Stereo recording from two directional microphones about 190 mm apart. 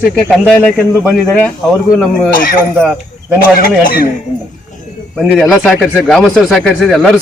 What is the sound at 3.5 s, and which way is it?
Speech, 50° left (ahead or behind).